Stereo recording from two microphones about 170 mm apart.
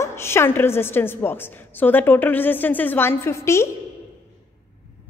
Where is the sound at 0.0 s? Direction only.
15° left (ahead or behind).